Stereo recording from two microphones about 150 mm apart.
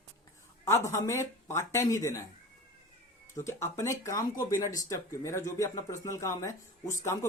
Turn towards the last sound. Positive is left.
turn(degrees=20)  # may be behind; listen again after turning